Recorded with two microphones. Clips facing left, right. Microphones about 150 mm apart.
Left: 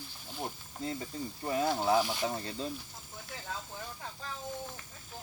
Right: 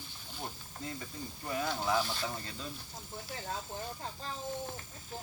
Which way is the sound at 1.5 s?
25° left (ahead or behind).